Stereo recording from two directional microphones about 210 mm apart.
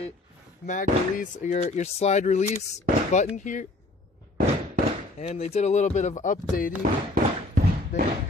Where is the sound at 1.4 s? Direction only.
35° left (ahead or behind).